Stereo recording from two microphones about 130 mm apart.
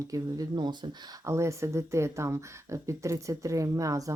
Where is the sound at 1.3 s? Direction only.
20° right (ahead or behind).